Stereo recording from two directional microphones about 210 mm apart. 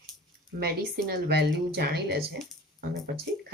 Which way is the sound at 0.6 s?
45° right (ahead or behind).